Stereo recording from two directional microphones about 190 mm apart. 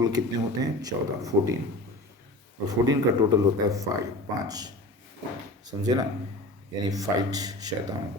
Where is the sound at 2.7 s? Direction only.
20° right (ahead or behind).